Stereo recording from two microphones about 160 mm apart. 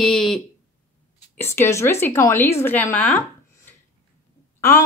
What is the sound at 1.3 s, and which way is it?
A woman's voice, 15° left (ahead or behind).